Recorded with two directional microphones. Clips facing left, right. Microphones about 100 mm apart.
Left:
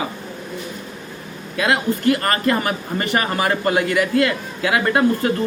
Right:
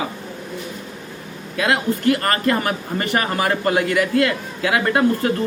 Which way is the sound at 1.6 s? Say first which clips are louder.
Even; 20° left (ahead or behind).